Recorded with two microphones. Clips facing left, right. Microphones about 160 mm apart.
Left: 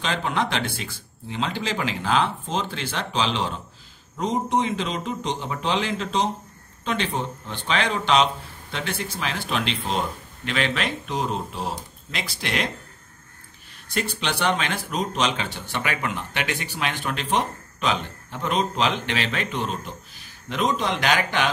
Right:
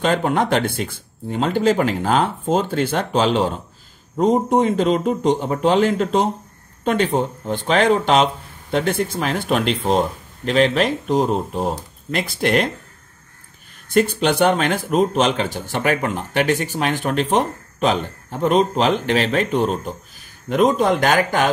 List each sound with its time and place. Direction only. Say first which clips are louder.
0.0 s speech: right 7 dB; 50° right (ahead or behind)
13.8 s speech: right 10 dB; 50° right (ahead or behind)